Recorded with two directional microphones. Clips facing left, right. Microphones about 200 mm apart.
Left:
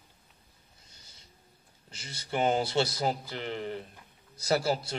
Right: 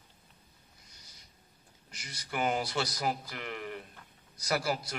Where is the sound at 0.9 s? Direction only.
25° left (ahead or behind).